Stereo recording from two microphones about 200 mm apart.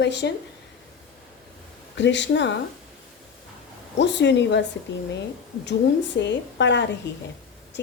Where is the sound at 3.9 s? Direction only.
60° left (ahead or behind).